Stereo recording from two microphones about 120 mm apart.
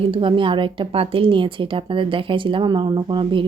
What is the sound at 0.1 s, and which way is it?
Speech, 45° right (ahead or behind).